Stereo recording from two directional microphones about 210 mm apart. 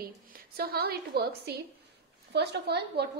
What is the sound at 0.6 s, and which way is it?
A woman's voice, 50° right (ahead or behind).